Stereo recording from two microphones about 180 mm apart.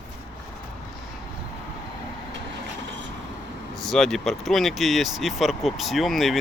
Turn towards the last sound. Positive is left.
turn(degrees=0)  # may be behind; listen again after turning